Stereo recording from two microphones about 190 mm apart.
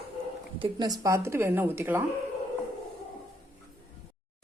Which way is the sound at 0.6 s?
20° right (ahead or behind).